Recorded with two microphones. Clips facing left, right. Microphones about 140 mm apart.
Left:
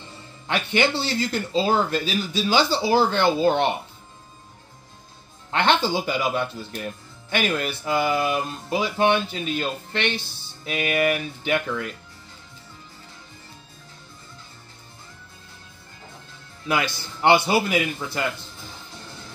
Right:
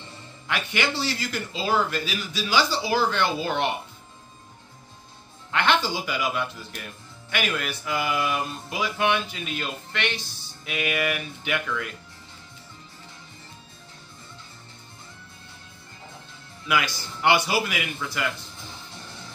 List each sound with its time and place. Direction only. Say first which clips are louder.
0.7 s speech: left 5 dB; 30° left (ahead or behind)
5.5 s speech: left 3 dB; 30° left (ahead or behind)
7.2 s music: left 4 dB; 30° left (ahead or behind)
16.6 s speech: left 1 dB; 30° left (ahead or behind)